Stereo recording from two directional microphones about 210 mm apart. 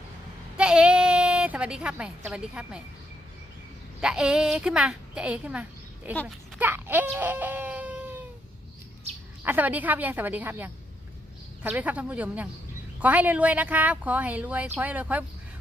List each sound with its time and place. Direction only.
0.5 s a sound: 5° right (ahead or behind)
4.0 s a woman's voice: 5° right (ahead or behind)
6.2 s baby cry: 10° right (ahead or behind)
9.4 s a woman's voice: 10° right (ahead or behind)